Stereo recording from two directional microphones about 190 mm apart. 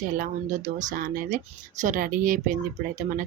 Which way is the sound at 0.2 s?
40° right (ahead or behind).